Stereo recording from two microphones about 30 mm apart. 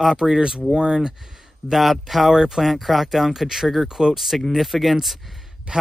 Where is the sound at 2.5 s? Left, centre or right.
Centre.